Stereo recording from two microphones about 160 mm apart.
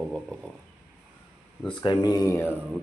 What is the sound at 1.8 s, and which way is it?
Speech, 25° left (ahead or behind).